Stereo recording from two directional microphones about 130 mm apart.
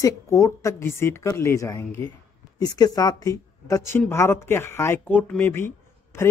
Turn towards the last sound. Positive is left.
turn(degrees=20)  # may be behind; listen again after turning